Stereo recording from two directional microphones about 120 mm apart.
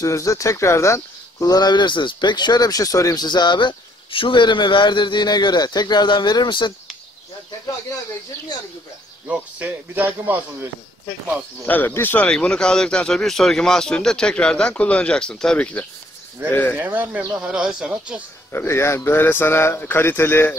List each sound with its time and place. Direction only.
0.0 s speech: 25° left (ahead or behind)
9.3 s speech: 15° right (ahead or behind)
11.6 s speech: 15° left (ahead or behind)
16.7 s speech: 15° right (ahead or behind)
18.5 s speech: 20° left (ahead or behind)